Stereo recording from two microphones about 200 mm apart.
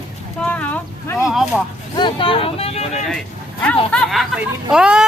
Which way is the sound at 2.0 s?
25° left (ahead or behind).